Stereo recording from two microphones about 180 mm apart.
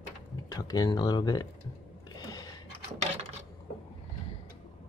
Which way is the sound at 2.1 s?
20° left (ahead or behind).